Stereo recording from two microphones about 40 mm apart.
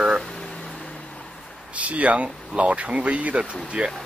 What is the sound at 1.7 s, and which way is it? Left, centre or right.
Speech, right.